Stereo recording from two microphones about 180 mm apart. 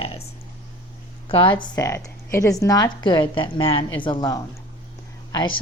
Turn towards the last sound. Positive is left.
turn(degrees=20)  # may be behind; listen again after turning